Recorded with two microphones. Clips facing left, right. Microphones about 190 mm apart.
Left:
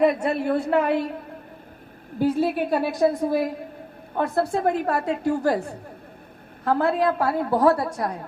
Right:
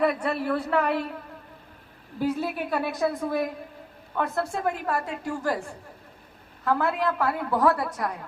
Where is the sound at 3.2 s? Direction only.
25° left (ahead or behind).